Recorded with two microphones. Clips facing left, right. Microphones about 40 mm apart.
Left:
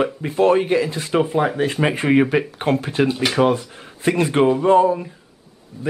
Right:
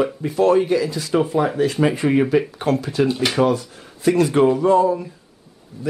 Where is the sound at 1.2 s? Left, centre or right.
Left.